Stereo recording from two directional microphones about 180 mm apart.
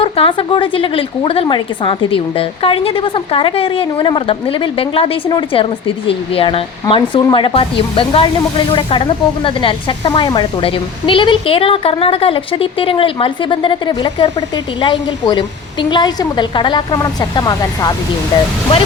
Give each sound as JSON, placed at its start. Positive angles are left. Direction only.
{"t": 0.0, "sound": "speech", "side_deg": 30}